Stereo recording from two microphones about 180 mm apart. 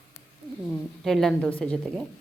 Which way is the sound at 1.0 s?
5° left (ahead or behind).